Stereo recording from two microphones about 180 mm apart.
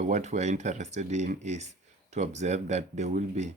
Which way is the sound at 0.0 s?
40° right (ahead or behind).